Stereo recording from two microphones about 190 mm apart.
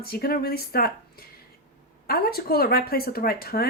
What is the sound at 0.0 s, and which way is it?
Speech, 55° left (ahead or behind).